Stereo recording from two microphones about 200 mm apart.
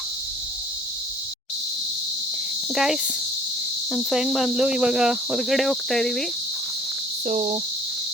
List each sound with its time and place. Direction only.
2.7 s cricket: centre (ahead or behind)
7.3 s speech: 35° right (ahead or behind)